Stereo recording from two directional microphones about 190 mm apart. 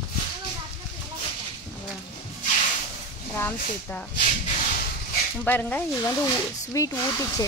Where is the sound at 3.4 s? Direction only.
10° left (ahead or behind).